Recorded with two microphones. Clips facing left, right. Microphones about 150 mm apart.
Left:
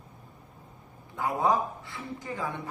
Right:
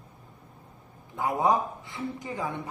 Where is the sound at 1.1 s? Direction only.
20° right (ahead or behind).